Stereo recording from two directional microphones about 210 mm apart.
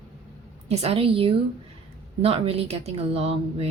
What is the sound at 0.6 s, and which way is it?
A woman's voice, 30° right (ahead or behind).